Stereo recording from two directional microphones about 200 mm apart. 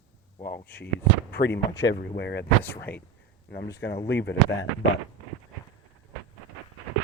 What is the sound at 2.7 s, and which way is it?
Speech, 10° left (ahead or behind).